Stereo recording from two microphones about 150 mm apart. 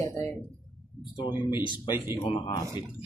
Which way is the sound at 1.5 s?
30° left (ahead or behind).